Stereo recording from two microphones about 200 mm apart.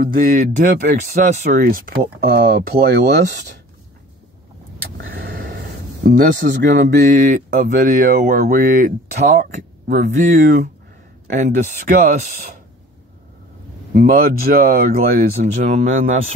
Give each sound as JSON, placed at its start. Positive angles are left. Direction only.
{"t": 0.0, "sound": "speech", "side_deg": -45}
{"t": 4.9, "sound": "vehicle", "side_deg": -50}
{"t": 6.0, "sound": "speech", "side_deg": -55}
{"t": 6.6, "sound": "speech", "side_deg": -40}
{"t": 13.9, "sound": "speech", "side_deg": -45}
{"t": 15.4, "sound": "speech", "side_deg": -35}